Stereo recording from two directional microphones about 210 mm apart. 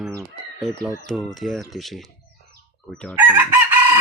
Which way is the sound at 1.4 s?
Centre (ahead or behind).